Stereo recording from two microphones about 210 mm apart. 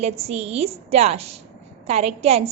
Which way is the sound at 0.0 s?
30° right (ahead or behind).